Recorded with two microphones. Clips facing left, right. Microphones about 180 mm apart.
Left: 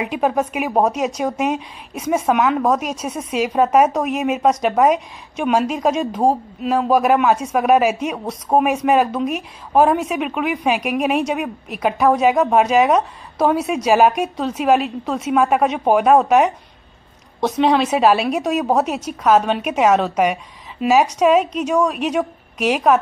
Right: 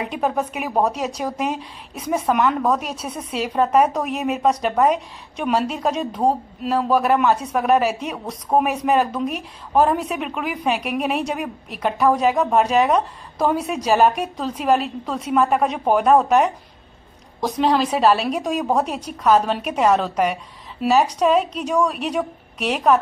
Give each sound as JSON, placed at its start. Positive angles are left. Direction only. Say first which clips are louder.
{"t": 0.0, "sound": "a woman's voice", "louder": "left 3 dB", "side_deg": 10}
{"t": 8.5, "sound": "speech", "louder": "left 2 dB", "side_deg": 25}
{"t": 8.8, "sound": "a woman's voice", "louder": "left 3 dB", "side_deg": 10}